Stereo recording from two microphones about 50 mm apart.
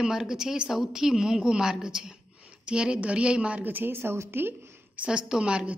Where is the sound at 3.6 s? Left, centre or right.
Right.